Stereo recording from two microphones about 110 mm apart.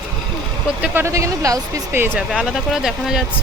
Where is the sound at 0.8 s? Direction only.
20° right (ahead or behind).